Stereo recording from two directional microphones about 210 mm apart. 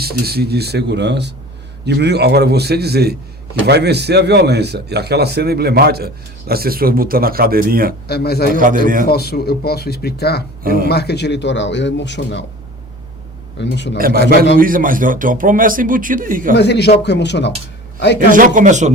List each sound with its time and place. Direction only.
0.0 s a man's voice: 50° right (ahead or behind)
8.0 s speech: 50° left (ahead or behind)
8.5 s a man's voice: 40° right (ahead or behind)
9.0 s a man's voice: 50° left (ahead or behind)
13.6 s a man's voice: 55° left (ahead or behind)
14.0 s a man's voice: 45° right (ahead or behind)
16.6 s a man's voice: 55° left (ahead or behind)
18.3 s a man's voice: 40° right (ahead or behind)